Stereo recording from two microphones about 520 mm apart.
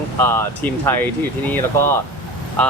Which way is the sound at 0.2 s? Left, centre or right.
Centre.